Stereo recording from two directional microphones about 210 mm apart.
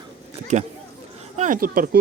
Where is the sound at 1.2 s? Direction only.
35° right (ahead or behind).